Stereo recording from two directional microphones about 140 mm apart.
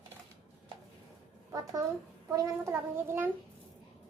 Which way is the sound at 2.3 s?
25° right (ahead or behind).